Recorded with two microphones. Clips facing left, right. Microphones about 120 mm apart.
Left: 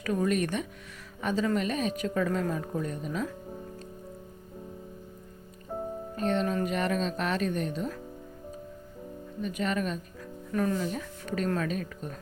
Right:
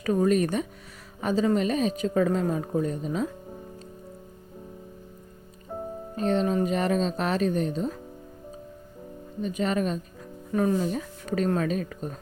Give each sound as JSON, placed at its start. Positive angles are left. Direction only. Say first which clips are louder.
{"t": 0.0, "sound": "speech", "louder": "right 5 dB", "side_deg": -35}
{"t": 5.7, "sound": "music", "louder": "even", "side_deg": 5}
{"t": 6.1, "sound": "speech", "louder": "right 4 dB", "side_deg": -35}
{"t": 9.4, "sound": "speech", "louder": "right 4 dB", "side_deg": -35}
{"t": 10.5, "sound": "speech", "louder": "right 4 dB", "side_deg": -20}
{"t": 10.8, "sound": "speech", "louder": "right 4 dB", "side_deg": -35}